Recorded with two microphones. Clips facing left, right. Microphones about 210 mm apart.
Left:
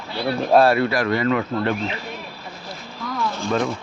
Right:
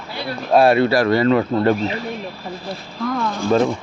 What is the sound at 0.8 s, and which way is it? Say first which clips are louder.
Speech: right 5 dB; 35° right (ahead or behind).